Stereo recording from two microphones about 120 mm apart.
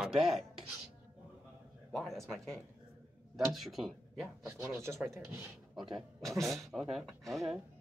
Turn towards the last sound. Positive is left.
turn(degrees=0)  # may be behind; listen again after turning